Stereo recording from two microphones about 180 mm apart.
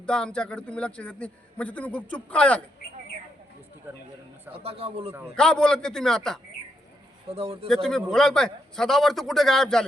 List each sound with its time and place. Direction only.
0.0 s a man's voice: 5° left (ahead or behind)
4.5 s a man's voice: 35° right (ahead or behind)
5.4 s a man's voice: 5° left (ahead or behind)
7.3 s a man's voice: 35° right (ahead or behind)
7.7 s a man's voice: 5° left (ahead or behind)